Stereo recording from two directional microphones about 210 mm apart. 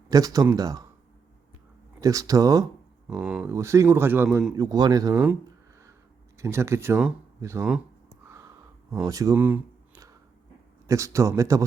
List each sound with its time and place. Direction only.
0.1 s a man's voice: 15° right (ahead or behind)
2.0 s a man's voice: 15° right (ahead or behind)
3.1 s a man's voice: 5° right (ahead or behind)
4.5 s a man's voice: 20° right (ahead or behind)
9.0 s a sound: 15° right (ahead or behind)
10.8 s a man's voice: 15° right (ahead or behind)